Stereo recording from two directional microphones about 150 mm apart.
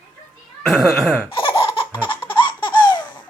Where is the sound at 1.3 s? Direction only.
35° left (ahead or behind).